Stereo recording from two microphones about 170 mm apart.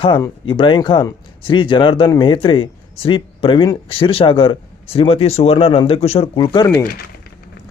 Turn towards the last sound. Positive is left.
turn(degrees=25)  # may be behind; listen again after turning